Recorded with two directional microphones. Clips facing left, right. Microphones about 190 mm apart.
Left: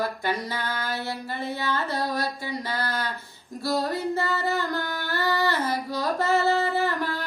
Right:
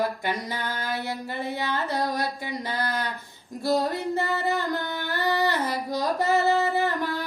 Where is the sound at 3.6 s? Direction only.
15° right (ahead or behind).